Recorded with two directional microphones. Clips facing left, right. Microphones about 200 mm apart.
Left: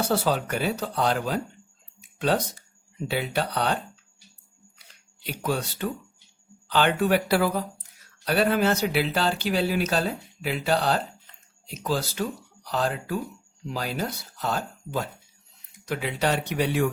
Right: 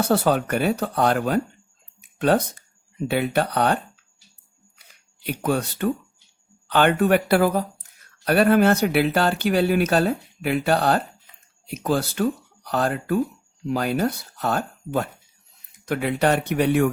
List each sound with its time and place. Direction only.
0.1 s speech: 55° right (ahead or behind)
2.0 s a sound: 55° right (ahead or behind)
3.1 s speech: 55° right (ahead or behind)
5.2 s speech: 55° right (ahead or behind)